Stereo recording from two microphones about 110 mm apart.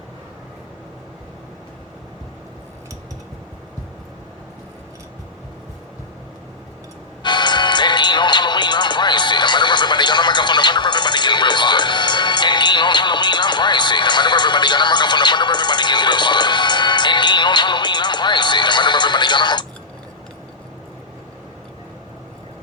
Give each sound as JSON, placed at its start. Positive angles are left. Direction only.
{"t": 7.2, "sound": "music", "side_deg": 45}